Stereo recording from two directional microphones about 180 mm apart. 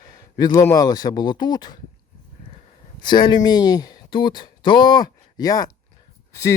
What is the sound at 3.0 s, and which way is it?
A man's voice, 25° left (ahead or behind).